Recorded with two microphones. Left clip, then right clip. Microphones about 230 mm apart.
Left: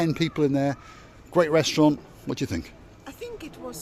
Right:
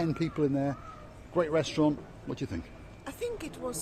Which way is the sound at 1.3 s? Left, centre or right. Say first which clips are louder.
Left 7 dB; left.